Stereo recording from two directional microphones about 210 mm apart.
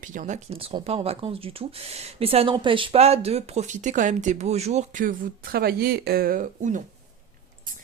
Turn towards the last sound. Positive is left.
turn(degrees=-35)  # may be behind; listen again after turning